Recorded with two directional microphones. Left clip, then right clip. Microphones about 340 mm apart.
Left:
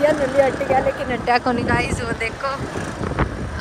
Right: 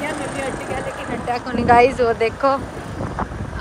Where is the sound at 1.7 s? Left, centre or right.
Centre.